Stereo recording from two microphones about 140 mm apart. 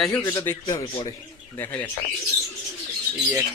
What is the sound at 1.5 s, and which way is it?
Speech, 15° left (ahead or behind).